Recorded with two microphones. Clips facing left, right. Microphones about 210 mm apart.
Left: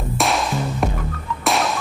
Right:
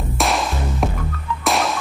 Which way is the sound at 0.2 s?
Centre (ahead or behind).